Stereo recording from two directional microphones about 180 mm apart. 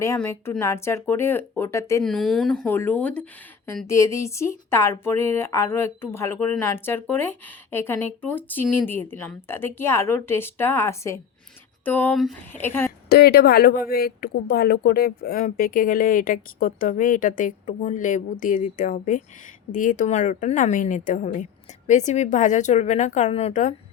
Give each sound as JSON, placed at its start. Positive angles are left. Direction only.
{"t": 0.0, "sound": "speech", "side_deg": 15}
{"t": 2.0, "sound": "speech", "side_deg": 0}
{"t": 13.1, "sound": "a woman's voice", "side_deg": 60}